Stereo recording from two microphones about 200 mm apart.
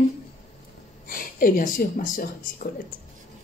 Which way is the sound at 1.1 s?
45° left (ahead or behind).